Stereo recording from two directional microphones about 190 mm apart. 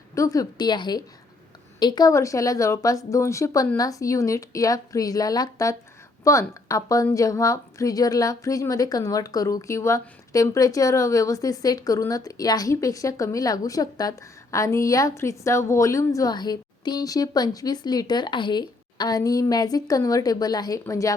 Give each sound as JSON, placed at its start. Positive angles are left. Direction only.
{"t": 0.1, "sound": "a woman's voice", "side_deg": 15}